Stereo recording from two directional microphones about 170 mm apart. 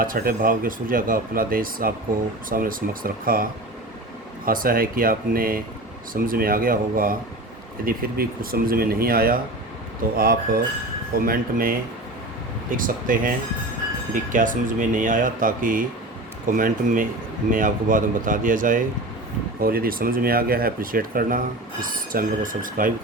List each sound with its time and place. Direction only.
0.0 s speech: 55° right (ahead or behind)